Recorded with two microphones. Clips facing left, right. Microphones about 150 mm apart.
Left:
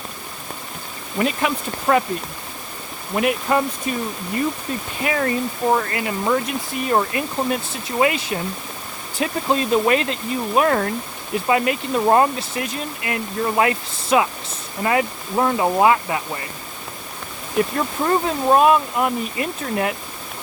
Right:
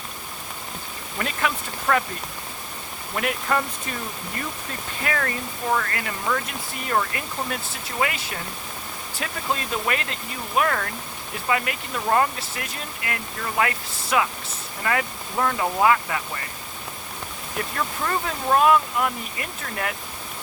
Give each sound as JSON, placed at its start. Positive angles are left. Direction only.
{"t": 1.2, "sound": "speech", "side_deg": 20}
{"t": 3.2, "sound": "speech", "side_deg": 20}
{"t": 5.0, "sound": "speech", "side_deg": 20}
{"t": 17.7, "sound": "speech", "side_deg": 25}